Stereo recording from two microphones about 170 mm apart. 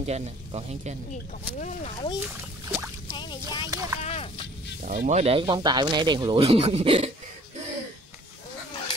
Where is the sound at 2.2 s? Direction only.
10° right (ahead or behind).